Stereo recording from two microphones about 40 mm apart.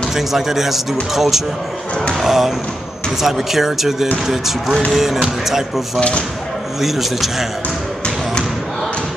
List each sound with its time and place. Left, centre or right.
0.1 s speech: centre
5.9 s speech: left
6.8 s a man's voice: centre